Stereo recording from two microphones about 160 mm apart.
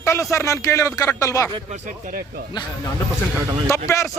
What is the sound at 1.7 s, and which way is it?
Speech, 50° right (ahead or behind).